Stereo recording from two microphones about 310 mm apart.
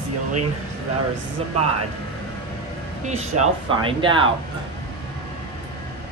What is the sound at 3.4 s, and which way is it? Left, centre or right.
Speech, centre.